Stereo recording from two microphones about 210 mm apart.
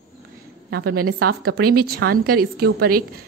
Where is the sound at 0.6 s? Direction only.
50° right (ahead or behind).